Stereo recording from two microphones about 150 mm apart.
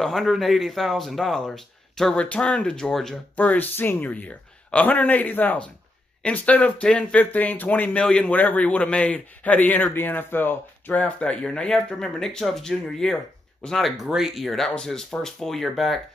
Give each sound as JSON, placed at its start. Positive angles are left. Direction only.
{"t": 0.0, "sound": "speech", "side_deg": 0}